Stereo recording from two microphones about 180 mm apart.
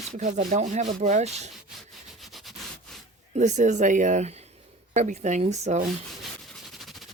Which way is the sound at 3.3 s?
40° right (ahead or behind).